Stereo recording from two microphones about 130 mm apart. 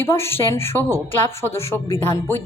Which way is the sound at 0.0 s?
20° left (ahead or behind).